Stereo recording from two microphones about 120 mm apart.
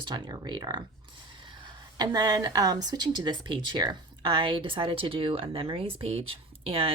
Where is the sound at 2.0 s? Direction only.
35° right (ahead or behind).